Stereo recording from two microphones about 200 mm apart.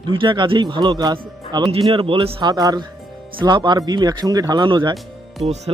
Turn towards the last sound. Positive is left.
turn(degrees=0)  # may be behind; listen again after turning